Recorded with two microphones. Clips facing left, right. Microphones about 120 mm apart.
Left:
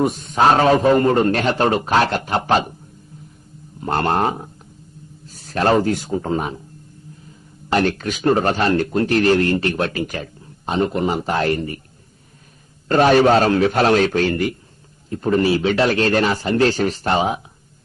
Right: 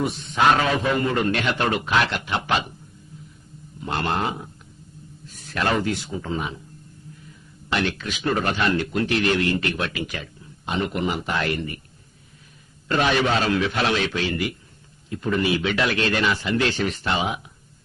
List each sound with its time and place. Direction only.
0.0 s a man's voice: 45° left (ahead or behind)
3.8 s a man's voice: 45° left (ahead or behind)
7.7 s a man's voice: 40° left (ahead or behind)
12.9 s a man's voice: 40° left (ahead or behind)